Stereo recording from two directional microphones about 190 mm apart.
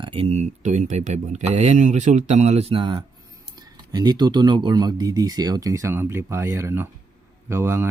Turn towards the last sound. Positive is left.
turn(degrees=-15)  # may be behind; listen again after turning